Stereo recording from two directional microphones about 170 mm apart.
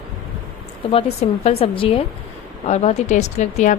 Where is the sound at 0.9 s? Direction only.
35° left (ahead or behind).